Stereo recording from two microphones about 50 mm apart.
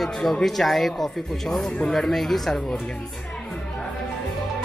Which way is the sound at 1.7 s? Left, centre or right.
Centre.